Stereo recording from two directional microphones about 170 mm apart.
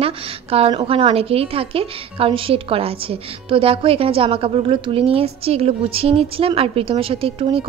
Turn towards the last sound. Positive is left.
turn(degrees=-35)  # may be behind; listen again after turning